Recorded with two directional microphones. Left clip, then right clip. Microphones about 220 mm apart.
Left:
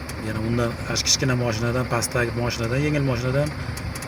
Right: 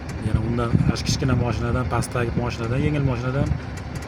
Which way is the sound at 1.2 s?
Centre (ahead or behind).